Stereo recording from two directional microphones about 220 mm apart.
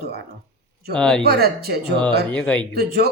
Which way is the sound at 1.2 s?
45° right (ahead or behind).